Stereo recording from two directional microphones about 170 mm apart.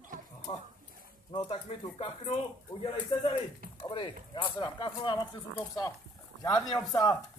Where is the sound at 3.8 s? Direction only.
30° left (ahead or behind).